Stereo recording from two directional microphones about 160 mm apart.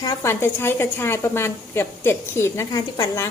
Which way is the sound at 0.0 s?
20° left (ahead or behind).